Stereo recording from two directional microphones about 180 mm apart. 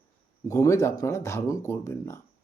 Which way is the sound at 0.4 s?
20° left (ahead or behind).